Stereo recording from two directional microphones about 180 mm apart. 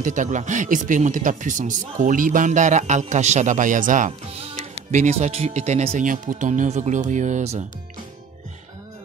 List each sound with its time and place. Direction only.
0.0 s speech: 45° right (ahead or behind)